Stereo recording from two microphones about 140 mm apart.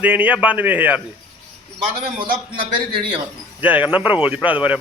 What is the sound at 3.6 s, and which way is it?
Speech, 10° right (ahead or behind).